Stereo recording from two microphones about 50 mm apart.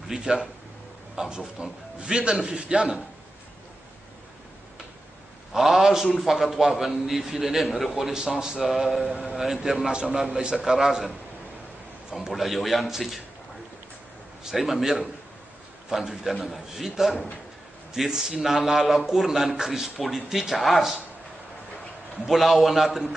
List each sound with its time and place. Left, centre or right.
0.1 s a man's voice: centre
5.5 s a man's voice: centre
14.4 s a man's voice: centre
22.2 s a man's voice: centre